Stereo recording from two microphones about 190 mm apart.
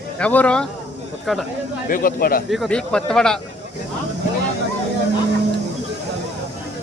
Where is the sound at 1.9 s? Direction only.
45° left (ahead or behind).